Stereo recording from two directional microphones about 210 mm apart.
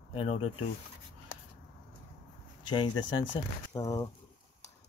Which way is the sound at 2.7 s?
25° left (ahead or behind).